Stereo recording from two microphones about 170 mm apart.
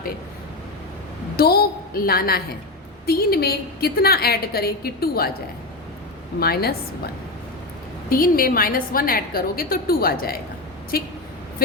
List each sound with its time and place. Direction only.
1.4 s a woman's voice: 65° left (ahead or behind)
6.4 s a woman's voice: 65° left (ahead or behind)
8.1 s a woman's voice: 60° left (ahead or behind)